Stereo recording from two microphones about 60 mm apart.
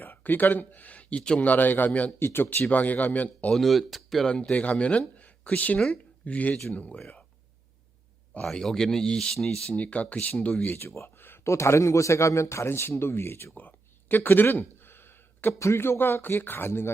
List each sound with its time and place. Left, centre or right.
0.0 s speech: left
1.4 s speech: left
2.1 s speech: left
2.6 s speech: left
3.5 s speech: centre
4.3 s speech: centre
8.5 s speech: centre
9.6 s speech: left
10.8 s a man's voice: left
13.6 s a sound: left
15.5 s speech: left